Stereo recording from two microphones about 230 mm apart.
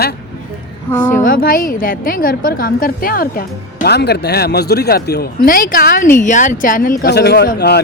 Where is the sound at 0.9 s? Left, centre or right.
Centre.